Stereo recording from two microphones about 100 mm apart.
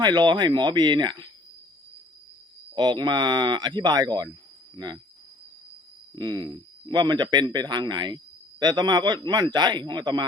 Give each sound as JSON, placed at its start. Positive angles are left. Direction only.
{"t": 0.0, "sound": "speech", "side_deg": -50}
{"t": 2.7, "sound": "speech", "side_deg": -45}
{"t": 6.1, "sound": "speech", "side_deg": -50}